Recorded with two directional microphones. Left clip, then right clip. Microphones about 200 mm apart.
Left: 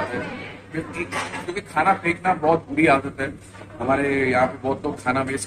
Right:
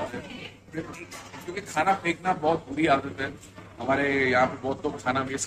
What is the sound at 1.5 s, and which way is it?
A man's voice, 10° right (ahead or behind).